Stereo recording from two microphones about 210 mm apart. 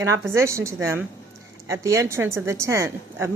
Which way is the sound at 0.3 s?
15° right (ahead or behind).